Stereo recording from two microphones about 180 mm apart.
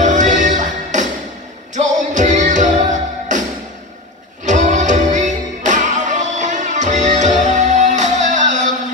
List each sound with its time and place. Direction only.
0.0 s music: 45° right (ahead or behind)
4.5 s music: 40° right (ahead or behind)